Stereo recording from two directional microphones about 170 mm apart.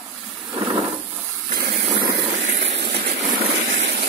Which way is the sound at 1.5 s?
70° right (ahead or behind).